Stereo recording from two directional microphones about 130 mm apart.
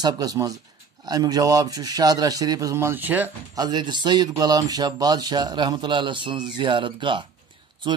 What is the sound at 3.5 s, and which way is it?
Speech, 35° right (ahead or behind).